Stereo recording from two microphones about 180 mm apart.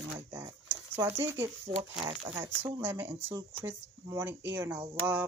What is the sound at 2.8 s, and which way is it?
Speech, 10° right (ahead or behind).